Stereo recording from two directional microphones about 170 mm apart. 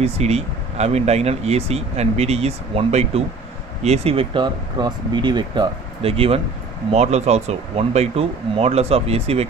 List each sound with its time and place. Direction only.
0.0 s speech: 40° right (ahead or behind)